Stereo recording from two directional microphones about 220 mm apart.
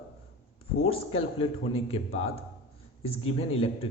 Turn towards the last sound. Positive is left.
turn(degrees=25)  # may be behind; listen again after turning